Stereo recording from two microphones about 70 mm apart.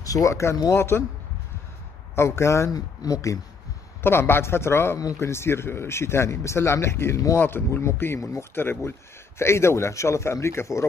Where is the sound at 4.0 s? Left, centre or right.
Left.